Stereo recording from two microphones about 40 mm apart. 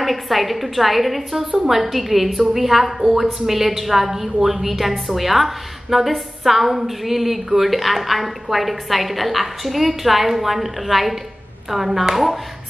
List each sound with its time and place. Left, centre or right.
0.0 s a woman's voice: centre